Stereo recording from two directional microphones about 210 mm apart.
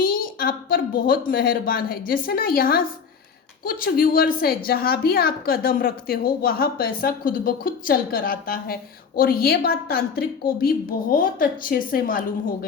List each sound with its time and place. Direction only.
0.0 s a woman's voice: 45° left (ahead or behind)